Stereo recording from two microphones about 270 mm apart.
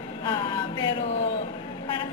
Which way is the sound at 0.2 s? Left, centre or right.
Centre.